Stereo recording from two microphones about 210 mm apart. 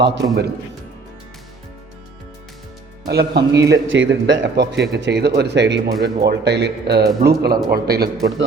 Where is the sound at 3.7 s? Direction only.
60° right (ahead or behind).